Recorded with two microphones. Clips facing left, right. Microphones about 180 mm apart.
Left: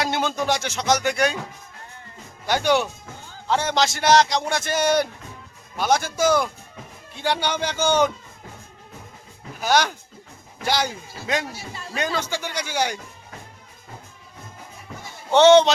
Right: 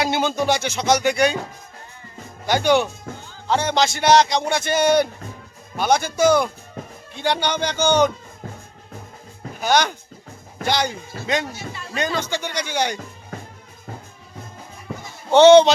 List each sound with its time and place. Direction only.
0.0 s a man's voice: centre (ahead or behind)
2.5 s a man's voice: centre (ahead or behind)
9.6 s a man's voice: 5° left (ahead or behind)
11.5 s speech: 35° left (ahead or behind)
11.9 s a man's voice: 5° left (ahead or behind)
15.3 s a man's voice: centre (ahead or behind)